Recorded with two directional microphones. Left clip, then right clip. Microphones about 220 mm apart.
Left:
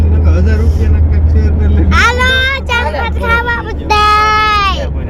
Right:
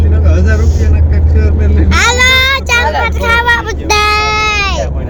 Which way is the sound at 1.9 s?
20° right (ahead or behind).